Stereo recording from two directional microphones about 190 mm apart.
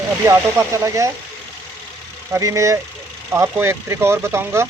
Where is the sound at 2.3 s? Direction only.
15° right (ahead or behind).